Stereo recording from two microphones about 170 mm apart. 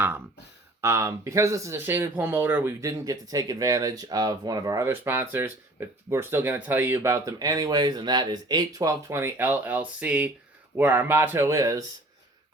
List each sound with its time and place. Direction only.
0.8 s speech: 15° right (ahead or behind)